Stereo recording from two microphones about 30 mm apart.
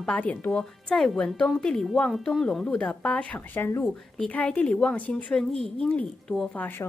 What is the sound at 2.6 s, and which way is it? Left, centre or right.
Speech, left.